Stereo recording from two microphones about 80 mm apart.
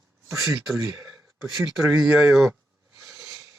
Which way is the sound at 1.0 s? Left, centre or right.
Centre.